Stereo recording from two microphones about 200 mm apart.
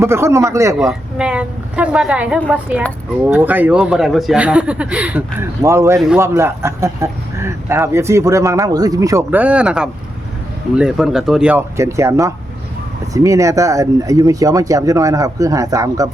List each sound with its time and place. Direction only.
0.0 s speech: 15° right (ahead or behind)
0.8 s a woman's voice: 5° right (ahead or behind)